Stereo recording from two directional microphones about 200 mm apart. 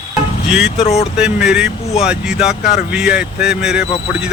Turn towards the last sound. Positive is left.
turn(degrees=-5)  # may be behind; listen again after turning